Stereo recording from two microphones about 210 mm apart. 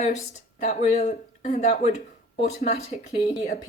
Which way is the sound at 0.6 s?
35° left (ahead or behind).